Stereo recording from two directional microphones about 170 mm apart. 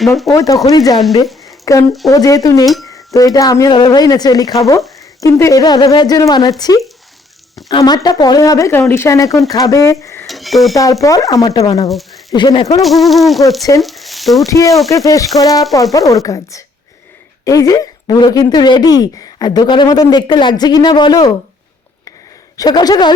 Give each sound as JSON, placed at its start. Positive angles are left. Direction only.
{"t": 0.0, "sound": "speech", "side_deg": 0}
{"t": 0.3, "sound": "speech", "side_deg": 20}
{"t": 1.5, "sound": "a sound", "side_deg": 20}
{"t": 2.0, "sound": "speech", "side_deg": 20}
{"t": 10.2, "sound": "a sound", "side_deg": 0}
{"t": 11.0, "sound": "speech", "side_deg": 20}
{"t": 12.8, "sound": "speech", "side_deg": 0}
{"t": 13.8, "sound": "a sound", "side_deg": 0}
{"t": 14.4, "sound": "speech", "side_deg": 20}
{"t": 22.5, "sound": "speech", "side_deg": 20}